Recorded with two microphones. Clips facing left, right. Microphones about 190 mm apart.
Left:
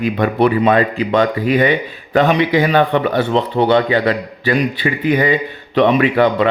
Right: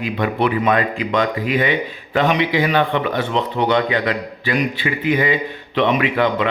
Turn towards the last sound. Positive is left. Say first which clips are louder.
# left 5 dB
turn(degrees=40)  # may be behind; listen again after turning